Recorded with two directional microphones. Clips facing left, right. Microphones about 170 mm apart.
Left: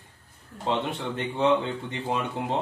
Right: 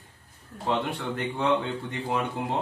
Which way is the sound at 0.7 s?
20° left (ahead or behind).